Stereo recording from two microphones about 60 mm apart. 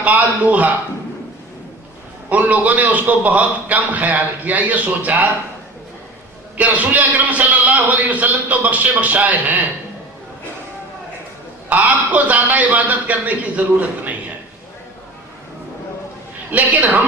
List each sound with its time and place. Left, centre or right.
0.0 s a man's voice: right
2.3 s a man's voice: right
6.6 s a man's voice: right
11.7 s a man's voice: right
16.5 s a man's voice: right